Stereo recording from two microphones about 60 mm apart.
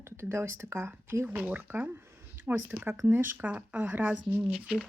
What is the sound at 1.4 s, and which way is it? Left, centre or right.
Speech, right.